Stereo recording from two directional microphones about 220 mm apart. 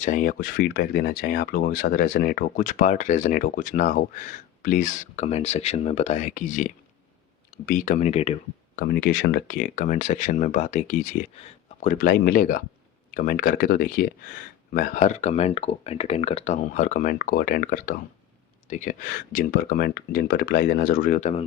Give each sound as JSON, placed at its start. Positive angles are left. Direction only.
{"t": 0.0, "sound": "speech", "side_deg": 35}
{"t": 7.7, "sound": "speech", "side_deg": 35}
{"t": 8.7, "sound": "speech", "side_deg": 45}